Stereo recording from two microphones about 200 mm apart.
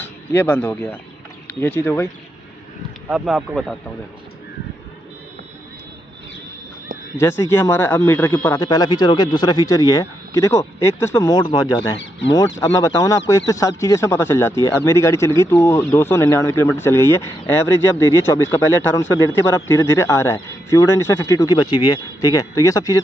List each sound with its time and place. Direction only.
0.5 s speech: 10° left (ahead or behind)
3.1 s speech: 5° right (ahead or behind)
7.2 s speech: 15° left (ahead or behind)